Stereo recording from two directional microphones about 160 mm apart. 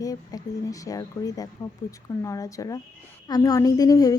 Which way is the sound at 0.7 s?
20° left (ahead or behind).